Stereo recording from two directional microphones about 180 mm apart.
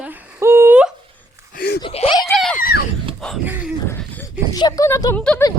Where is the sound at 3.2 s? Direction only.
5° left (ahead or behind).